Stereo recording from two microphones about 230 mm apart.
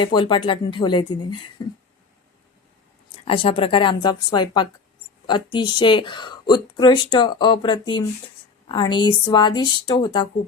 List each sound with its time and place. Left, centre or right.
0.0 s a woman's voice: left
3.2 s a woman's voice: left